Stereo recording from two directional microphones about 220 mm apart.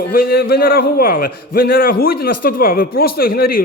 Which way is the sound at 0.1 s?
45° left (ahead or behind).